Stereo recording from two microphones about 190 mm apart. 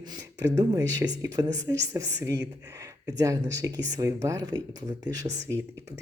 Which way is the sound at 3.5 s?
20° right (ahead or behind).